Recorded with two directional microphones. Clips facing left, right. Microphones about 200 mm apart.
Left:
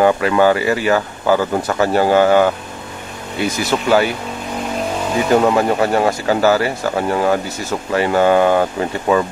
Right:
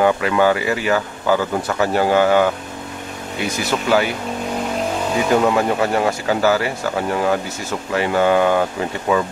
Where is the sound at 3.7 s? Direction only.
40° left (ahead or behind).